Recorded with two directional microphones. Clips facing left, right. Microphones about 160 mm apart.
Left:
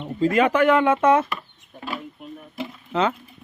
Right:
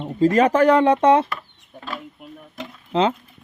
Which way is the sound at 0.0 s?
40° right (ahead or behind).